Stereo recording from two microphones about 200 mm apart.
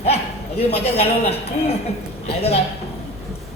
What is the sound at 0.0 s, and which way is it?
A man's voice, 30° left (ahead or behind).